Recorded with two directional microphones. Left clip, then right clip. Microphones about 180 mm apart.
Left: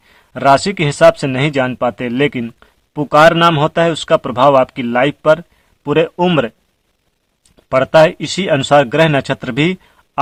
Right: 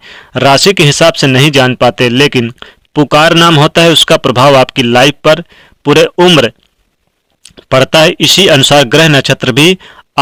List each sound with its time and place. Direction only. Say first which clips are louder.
0.0 s speech: right 5 dB; 30° right (ahead or behind)
7.4 s speech: right 6 dB; 30° right (ahead or behind)